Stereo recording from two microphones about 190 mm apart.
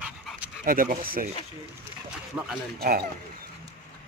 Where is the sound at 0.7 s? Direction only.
45° right (ahead or behind).